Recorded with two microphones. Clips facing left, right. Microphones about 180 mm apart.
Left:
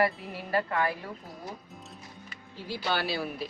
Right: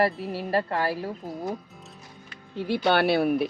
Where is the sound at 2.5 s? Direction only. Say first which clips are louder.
Right 9 dB; 65° right (ahead or behind).